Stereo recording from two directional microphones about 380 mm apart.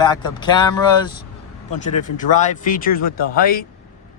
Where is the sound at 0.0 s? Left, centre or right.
Centre.